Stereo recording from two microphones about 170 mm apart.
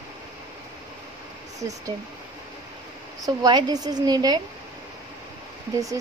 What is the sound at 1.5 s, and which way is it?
Speech, 20° right (ahead or behind).